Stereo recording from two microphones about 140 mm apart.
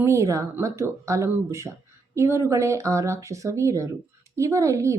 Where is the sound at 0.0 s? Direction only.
20° right (ahead or behind).